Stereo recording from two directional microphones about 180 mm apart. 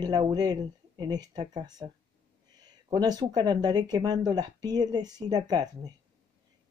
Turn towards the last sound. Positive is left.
turn(degrees=-20)  # may be behind; listen again after turning